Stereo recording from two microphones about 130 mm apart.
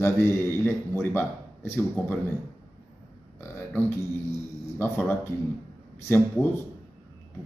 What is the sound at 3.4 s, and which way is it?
A man's voice, 15° left (ahead or behind).